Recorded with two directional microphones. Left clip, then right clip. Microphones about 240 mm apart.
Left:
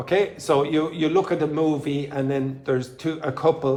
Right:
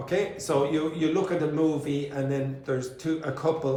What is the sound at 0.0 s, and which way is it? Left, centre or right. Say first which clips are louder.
A man's voice: left 6 dB; centre.